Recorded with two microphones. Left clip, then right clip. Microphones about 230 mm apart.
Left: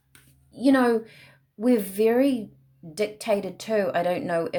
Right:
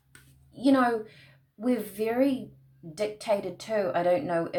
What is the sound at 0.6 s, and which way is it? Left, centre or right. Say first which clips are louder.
Speech: left 3 dB; left.